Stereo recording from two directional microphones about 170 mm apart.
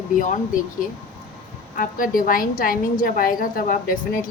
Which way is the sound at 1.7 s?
55° left (ahead or behind).